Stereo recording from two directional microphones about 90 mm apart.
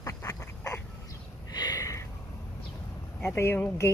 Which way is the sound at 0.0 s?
35° left (ahead or behind).